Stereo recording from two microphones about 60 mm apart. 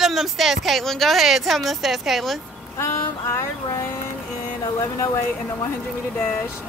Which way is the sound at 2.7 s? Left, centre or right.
Left.